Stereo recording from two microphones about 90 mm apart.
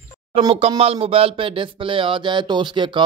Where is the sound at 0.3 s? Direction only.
90° right.